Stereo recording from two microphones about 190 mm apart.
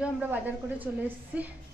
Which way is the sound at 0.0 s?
10° right (ahead or behind).